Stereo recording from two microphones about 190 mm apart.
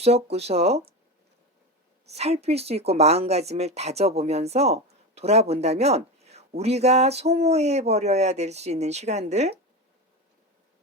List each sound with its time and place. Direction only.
0.0 s speech: 35° right (ahead or behind)
2.0 s speech: 35° right (ahead or behind)